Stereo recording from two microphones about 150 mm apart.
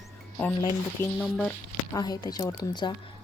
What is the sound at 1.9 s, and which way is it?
Speech, 25° left (ahead or behind).